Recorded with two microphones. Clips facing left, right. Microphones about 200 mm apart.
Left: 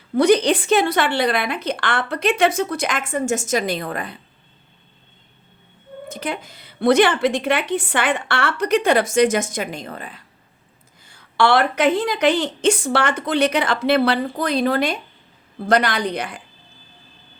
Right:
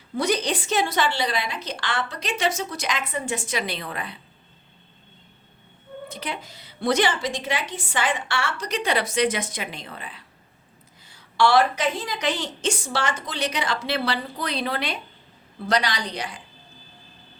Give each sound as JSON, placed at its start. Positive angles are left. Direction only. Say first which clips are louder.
{"t": 0.2, "sound": "a woman's voice", "louder": "left 9 dB", "side_deg": 60}
{"t": 6.1, "sound": "a woman's voice", "louder": "left 7 dB", "side_deg": 50}